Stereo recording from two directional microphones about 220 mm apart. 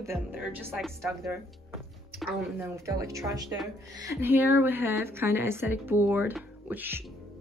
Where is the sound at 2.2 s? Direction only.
10° right (ahead or behind).